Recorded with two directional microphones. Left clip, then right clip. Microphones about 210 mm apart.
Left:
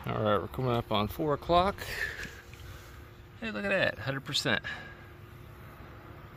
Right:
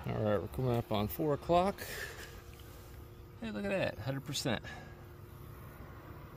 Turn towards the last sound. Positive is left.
turn(degrees=-5)  # may be behind; listen again after turning